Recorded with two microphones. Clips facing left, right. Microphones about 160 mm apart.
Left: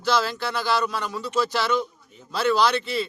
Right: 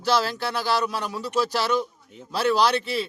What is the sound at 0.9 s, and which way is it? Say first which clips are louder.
Speech: even; 5° right (ahead or behind).